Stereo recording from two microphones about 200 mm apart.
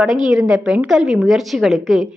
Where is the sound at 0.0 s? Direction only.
Centre (ahead or behind).